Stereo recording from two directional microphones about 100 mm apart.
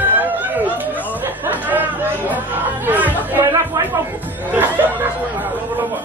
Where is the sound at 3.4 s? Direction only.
30° right (ahead or behind).